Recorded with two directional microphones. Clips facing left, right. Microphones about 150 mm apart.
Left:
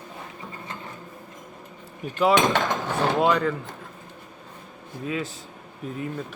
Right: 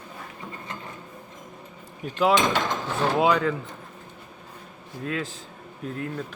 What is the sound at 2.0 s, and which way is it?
Speech, centre (ahead or behind).